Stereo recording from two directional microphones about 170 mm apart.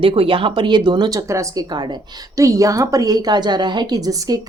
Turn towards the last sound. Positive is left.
turn(degrees=-20)  # may be behind; listen again after turning